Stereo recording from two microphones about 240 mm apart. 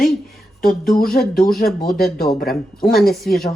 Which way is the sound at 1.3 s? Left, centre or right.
Left.